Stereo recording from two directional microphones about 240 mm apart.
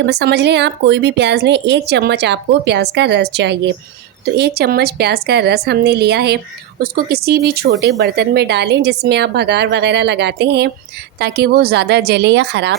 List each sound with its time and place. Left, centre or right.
0.0 s a woman's voice: right